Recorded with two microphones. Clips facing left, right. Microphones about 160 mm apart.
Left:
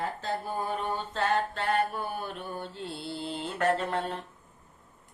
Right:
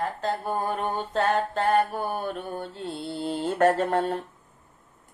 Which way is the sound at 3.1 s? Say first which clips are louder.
Right 9 dB; 45° right (ahead or behind).